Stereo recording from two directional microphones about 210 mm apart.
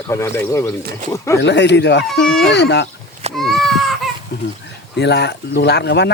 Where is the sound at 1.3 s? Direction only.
55° left (ahead or behind).